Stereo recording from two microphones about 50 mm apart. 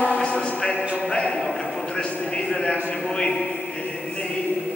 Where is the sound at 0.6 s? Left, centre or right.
Centre.